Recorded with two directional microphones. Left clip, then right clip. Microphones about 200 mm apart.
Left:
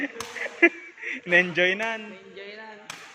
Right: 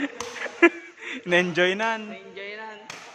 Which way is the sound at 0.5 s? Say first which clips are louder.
Right 1 dB; 15° right (ahead or behind).